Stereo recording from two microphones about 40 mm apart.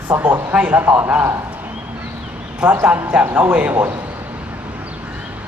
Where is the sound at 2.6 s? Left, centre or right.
Right.